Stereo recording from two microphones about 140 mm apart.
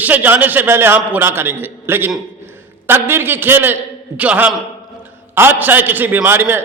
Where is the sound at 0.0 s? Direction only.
10° right (ahead or behind).